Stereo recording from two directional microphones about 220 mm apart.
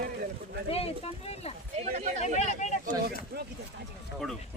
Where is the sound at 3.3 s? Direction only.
45° right (ahead or behind).